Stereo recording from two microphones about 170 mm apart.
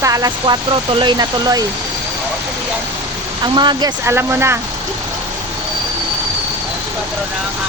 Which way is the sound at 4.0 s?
15° right (ahead or behind).